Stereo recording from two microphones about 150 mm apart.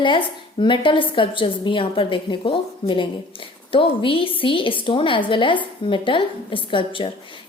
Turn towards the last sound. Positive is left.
turn(degrees=35)  # may be behind; listen again after turning